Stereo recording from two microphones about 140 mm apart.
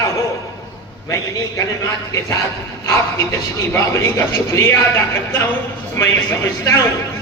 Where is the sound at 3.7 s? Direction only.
20° left (ahead or behind).